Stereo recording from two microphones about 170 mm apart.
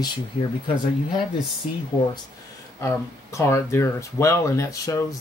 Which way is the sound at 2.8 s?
15° left (ahead or behind).